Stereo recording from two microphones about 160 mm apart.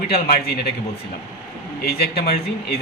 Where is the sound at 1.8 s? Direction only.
85° left.